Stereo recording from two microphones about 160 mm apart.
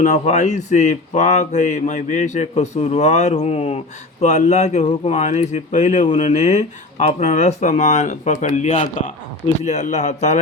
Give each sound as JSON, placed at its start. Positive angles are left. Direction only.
{"t": 0.0, "sound": "speech", "side_deg": 50}